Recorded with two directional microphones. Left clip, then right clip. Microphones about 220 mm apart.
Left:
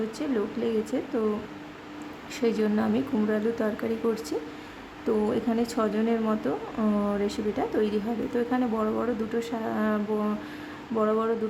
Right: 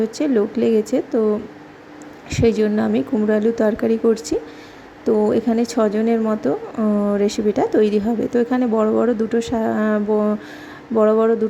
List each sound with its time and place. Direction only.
0.2 s speech: 25° right (ahead or behind)
2.3 s speech: 25° right (ahead or behind)